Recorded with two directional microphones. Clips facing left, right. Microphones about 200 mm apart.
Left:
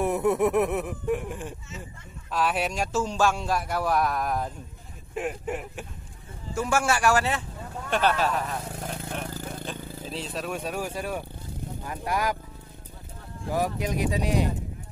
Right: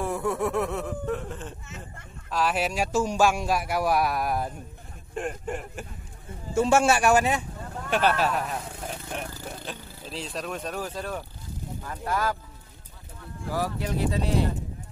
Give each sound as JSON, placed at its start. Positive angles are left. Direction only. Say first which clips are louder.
{"t": 0.0, "sound": "speech", "louder": "left 4 dB", "side_deg": 20}
{"t": 2.3, "sound": "a man's voice", "louder": "right 1 dB", "side_deg": 0}
{"t": 5.1, "sound": "speech", "louder": "left 1 dB", "side_deg": 5}
{"t": 6.5, "sound": "a man's voice", "louder": "right 5 dB", "side_deg": -25}
{"t": 9.7, "sound": "speech", "louder": "left 3 dB", "side_deg": 0}
{"t": 13.5, "sound": "speech", "louder": "left 2 dB", "side_deg": 20}